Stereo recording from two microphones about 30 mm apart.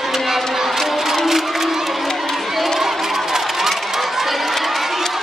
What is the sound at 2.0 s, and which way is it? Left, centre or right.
Crowd, centre.